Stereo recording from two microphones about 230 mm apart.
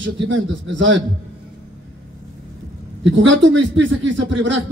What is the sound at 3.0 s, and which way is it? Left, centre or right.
A man's voice, right.